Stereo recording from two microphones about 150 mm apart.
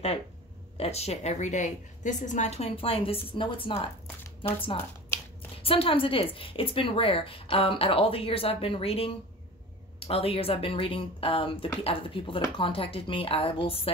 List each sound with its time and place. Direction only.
0.7 s a woman's voice: 45° left (ahead or behind)
5.6 s speech: 35° left (ahead or behind)